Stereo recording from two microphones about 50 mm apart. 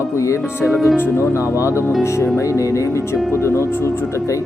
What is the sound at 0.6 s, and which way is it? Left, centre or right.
Speech, centre.